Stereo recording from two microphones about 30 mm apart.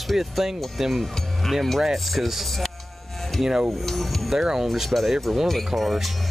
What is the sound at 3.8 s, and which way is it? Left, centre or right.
Speech, centre.